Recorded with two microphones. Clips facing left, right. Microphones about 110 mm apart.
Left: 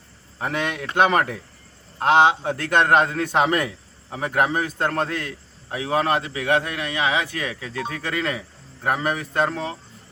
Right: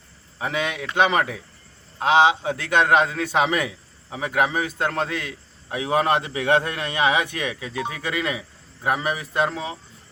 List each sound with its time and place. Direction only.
0.3 s a man's voice: centre (ahead or behind)
5.7 s a man's voice: 20° right (ahead or behind)